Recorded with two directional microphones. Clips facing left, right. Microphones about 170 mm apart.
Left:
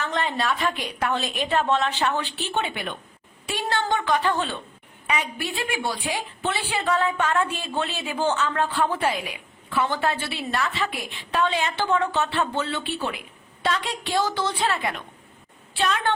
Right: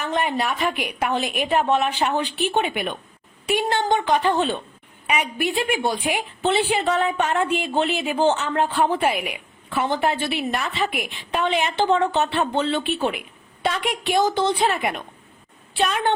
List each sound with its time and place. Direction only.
0.0 s a woman's voice: 15° right (ahead or behind)